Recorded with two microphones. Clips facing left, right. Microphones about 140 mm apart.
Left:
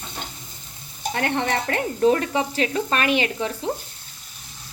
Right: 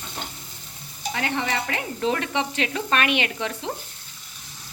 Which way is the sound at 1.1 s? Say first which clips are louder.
Left 3 dB; 55° left (ahead or behind).